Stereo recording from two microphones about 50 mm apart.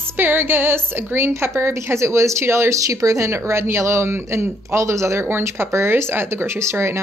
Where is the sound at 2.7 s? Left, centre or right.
Right.